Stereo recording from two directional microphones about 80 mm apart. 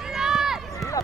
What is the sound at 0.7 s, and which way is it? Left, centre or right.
Run, left.